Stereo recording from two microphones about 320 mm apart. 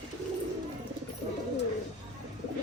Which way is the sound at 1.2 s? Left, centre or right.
Centre.